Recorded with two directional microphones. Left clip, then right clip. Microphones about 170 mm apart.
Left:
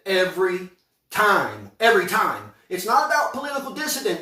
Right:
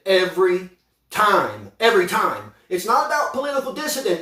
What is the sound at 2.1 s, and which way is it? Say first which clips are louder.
Speech: right 1 dB; 5° right (ahead or behind).